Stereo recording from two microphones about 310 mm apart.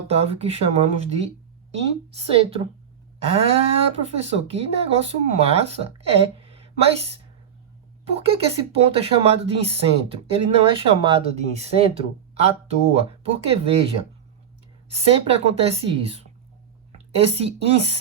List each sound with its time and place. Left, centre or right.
0.1 s speech: centre
8.1 s speech: centre
14.9 s speech: centre